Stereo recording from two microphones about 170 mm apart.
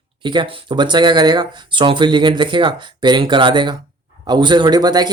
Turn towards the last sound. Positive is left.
turn(degrees=-25)  # may be behind; listen again after turning